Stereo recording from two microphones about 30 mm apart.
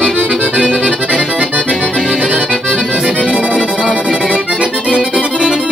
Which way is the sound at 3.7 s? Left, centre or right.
Right.